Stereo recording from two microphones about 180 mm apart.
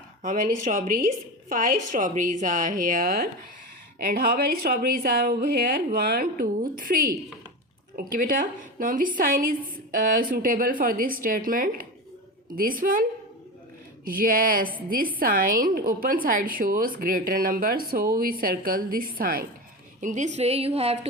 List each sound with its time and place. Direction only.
0.2 s a woman's voice: 45° right (ahead or behind)
20.0 s a woman's voice: 40° right (ahead or behind)